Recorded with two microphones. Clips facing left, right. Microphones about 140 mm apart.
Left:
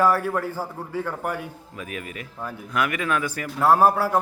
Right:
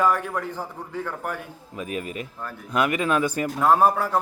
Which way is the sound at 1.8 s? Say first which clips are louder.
Right 4 dB; 25° right (ahead or behind).